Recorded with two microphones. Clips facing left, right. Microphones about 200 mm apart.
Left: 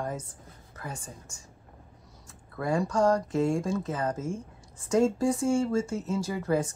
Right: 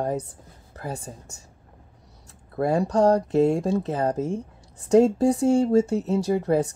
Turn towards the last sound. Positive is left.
turn(degrees=-35)  # may be behind; listen again after turning